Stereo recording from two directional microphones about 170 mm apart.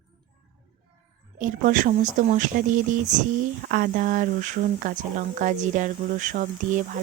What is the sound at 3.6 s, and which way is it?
Speech, 60° right (ahead or behind).